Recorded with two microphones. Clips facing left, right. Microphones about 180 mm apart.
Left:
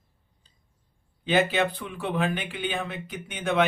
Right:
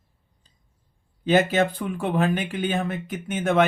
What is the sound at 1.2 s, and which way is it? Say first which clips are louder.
Speech: right 4 dB; 45° right (ahead or behind).